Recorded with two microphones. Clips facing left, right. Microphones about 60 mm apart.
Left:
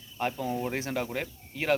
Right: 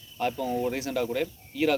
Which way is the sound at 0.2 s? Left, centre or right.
Centre.